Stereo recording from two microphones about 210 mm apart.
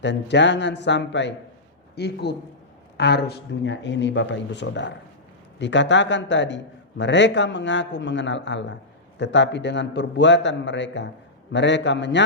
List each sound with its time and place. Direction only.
0.0 s a man's voice: 55° left (ahead or behind)